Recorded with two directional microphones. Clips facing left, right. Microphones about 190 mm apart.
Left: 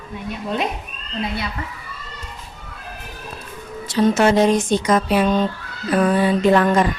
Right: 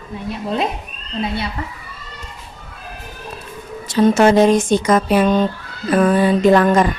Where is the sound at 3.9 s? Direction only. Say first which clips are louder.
Right 3 dB; 50° right (ahead or behind).